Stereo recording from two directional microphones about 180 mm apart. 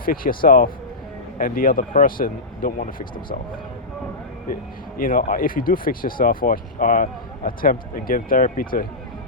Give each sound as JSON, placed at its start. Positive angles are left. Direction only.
{"t": 0.0, "sound": "speech", "side_deg": 55}
{"t": 4.9, "sound": "speech", "side_deg": 50}